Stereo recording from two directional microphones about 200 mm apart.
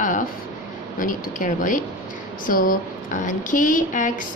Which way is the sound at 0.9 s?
40° left (ahead or behind).